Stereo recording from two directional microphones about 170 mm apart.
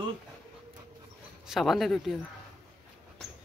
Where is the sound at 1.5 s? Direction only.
Centre (ahead or behind).